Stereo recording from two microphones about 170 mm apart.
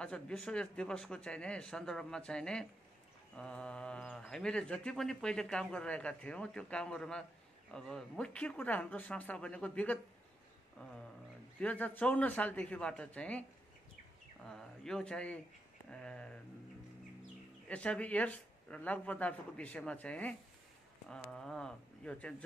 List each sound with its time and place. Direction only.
0.0 s speech: 5° left (ahead or behind)
14.5 s speech: 5° left (ahead or behind)
17.6 s speech: 5° left (ahead or behind)